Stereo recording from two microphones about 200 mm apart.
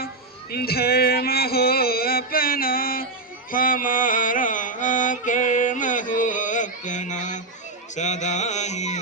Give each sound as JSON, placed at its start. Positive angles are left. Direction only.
{"t": 0.5, "sound": "music", "side_deg": 50}
{"t": 7.9, "sound": "carnatic music", "side_deg": 35}